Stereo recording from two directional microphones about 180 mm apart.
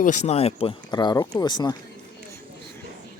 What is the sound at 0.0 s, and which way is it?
Speech, 40° left (ahead or behind).